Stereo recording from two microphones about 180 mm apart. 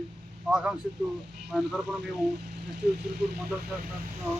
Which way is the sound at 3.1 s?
60° right (ahead or behind).